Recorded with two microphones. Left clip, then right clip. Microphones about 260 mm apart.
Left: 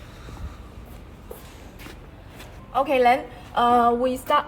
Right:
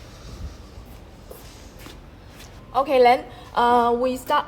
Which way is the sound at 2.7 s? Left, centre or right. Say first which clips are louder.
Right 2 dB; right.